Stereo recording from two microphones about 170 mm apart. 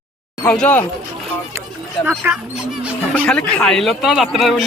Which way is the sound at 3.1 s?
5° left (ahead or behind).